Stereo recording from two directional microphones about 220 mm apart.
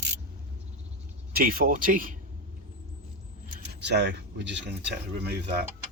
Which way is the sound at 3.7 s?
50° right (ahead or behind).